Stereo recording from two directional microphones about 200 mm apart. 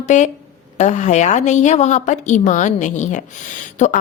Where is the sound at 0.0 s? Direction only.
35° left (ahead or behind).